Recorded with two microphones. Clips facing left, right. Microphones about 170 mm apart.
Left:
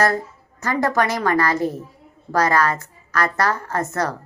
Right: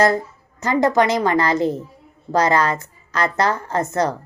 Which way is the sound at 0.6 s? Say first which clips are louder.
Right 4 dB; 20° right (ahead or behind).